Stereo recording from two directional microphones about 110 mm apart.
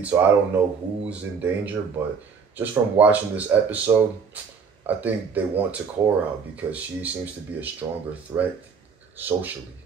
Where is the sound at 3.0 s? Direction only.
15° right (ahead or behind).